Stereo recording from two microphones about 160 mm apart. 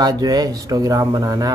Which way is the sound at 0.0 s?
25° right (ahead or behind).